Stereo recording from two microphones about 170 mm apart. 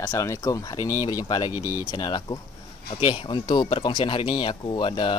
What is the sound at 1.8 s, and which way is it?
Speech, 25° left (ahead or behind).